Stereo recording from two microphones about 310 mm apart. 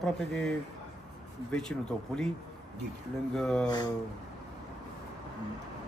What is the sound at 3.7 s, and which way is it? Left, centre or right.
Speech, centre.